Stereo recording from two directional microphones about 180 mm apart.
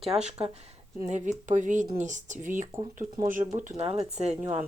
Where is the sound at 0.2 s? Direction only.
35° right (ahead or behind).